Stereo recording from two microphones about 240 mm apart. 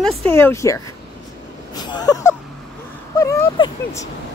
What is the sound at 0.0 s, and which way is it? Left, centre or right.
Speech, centre.